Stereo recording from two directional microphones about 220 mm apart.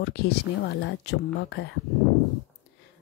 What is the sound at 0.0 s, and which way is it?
Speech, 50° left (ahead or behind).